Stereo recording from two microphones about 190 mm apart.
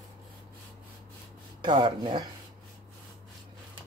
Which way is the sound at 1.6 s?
25° right (ahead or behind).